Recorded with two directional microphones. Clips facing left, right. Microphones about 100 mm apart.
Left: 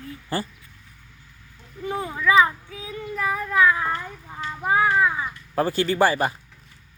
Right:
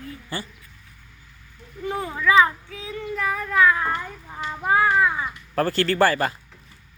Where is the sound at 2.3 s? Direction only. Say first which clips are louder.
Even; 20° left (ahead or behind).